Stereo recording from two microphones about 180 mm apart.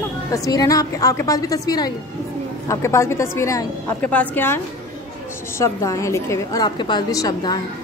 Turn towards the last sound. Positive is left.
turn(degrees=20)  # may be behind; listen again after turning